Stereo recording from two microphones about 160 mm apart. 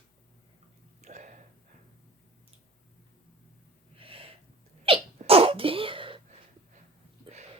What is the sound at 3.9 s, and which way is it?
Gasp, 35° right (ahead or behind).